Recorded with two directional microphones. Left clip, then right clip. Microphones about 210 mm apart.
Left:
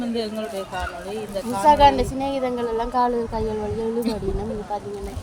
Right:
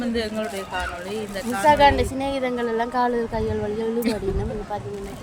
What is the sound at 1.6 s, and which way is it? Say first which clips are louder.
A woman's voice: left 1 dB; centre (ahead or behind).